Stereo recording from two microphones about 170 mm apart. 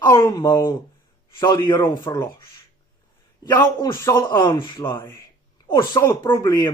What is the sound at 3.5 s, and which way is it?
Speech, 15° left (ahead or behind).